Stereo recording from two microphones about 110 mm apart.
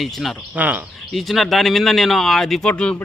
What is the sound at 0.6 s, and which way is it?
Speech, 15° right (ahead or behind).